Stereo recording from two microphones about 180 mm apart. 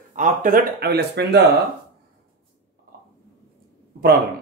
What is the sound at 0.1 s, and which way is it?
Speech, 45° right (ahead or behind).